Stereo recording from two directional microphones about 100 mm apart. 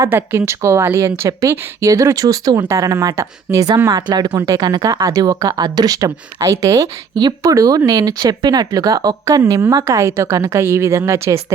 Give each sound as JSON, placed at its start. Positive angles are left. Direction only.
{"t": 0.1, "sound": "a woman's voice", "side_deg": -20}